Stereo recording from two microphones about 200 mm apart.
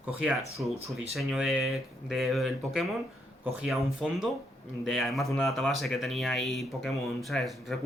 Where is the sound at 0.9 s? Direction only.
Centre (ahead or behind).